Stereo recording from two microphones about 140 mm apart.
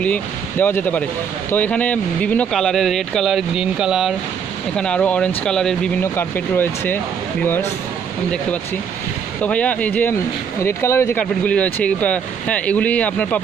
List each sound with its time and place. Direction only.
0.0 s speech: 10° left (ahead or behind); by 4.1 s 5° right (ahead or behind)
4.7 s speech: 5° left (ahead or behind)
6.1 s speech: 15° left (ahead or behind)
9.4 s speech: 10° left (ahead or behind)